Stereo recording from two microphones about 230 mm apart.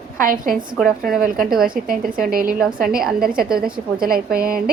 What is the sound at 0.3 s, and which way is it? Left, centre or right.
Speech, right.